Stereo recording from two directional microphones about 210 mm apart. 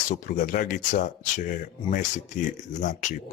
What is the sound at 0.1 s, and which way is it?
Speech, 40° left (ahead or behind).